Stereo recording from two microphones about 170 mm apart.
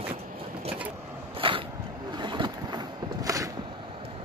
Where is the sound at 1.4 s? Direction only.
30° right (ahead or behind).